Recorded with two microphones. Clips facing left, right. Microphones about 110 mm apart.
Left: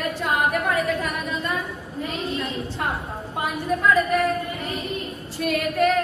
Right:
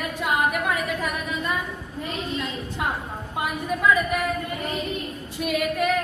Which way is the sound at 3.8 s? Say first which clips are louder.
Left 2 dB; 5° right (ahead or behind).